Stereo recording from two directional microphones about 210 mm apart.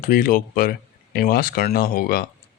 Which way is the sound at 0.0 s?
40° left (ahead or behind).